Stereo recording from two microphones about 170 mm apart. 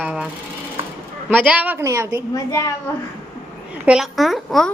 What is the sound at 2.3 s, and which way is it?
Speech, 20° left (ahead or behind).